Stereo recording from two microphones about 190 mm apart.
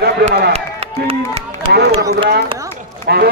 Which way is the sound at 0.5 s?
30° right (ahead or behind).